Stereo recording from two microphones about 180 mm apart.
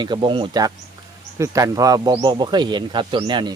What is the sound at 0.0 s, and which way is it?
Speech, 25° right (ahead or behind).